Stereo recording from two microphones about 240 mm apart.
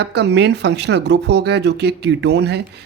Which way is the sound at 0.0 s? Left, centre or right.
Right.